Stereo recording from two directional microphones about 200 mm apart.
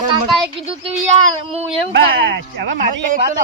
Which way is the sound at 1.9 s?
55° right (ahead or behind).